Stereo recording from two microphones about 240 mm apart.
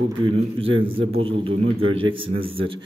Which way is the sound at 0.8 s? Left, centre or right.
Right.